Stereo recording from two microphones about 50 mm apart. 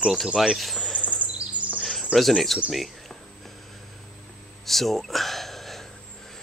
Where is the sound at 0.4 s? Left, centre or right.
Centre.